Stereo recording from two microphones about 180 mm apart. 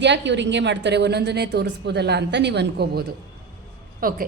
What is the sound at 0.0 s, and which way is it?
A woman's voice, 80° right.